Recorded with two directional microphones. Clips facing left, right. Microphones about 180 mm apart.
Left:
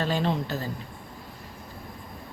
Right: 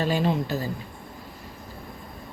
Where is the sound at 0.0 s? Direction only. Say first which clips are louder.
Right 2 dB; 10° right (ahead or behind).